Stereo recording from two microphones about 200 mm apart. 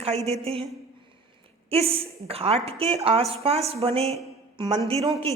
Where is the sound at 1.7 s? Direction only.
30° right (ahead or behind).